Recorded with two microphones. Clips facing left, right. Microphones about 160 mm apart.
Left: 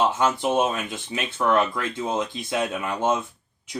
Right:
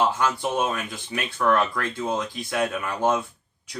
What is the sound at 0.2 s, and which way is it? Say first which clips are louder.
Speech: left 3 dB; 20° left (ahead or behind).